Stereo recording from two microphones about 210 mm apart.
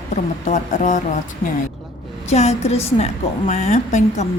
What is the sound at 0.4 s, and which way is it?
Speech, 35° left (ahead or behind).